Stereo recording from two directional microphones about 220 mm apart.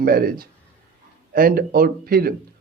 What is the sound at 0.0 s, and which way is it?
Speech, 40° right (ahead or behind).